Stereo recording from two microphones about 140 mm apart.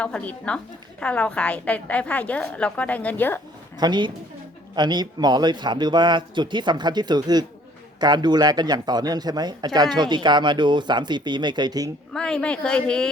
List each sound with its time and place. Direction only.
0.0 s a woman's voice: 10° left (ahead or behind)
3.8 s speech: 30° right (ahead or behind)
12.1 s a woman's voice: 5° left (ahead or behind)